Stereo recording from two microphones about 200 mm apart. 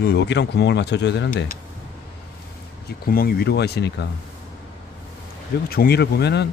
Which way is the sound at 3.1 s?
50° left (ahead or behind).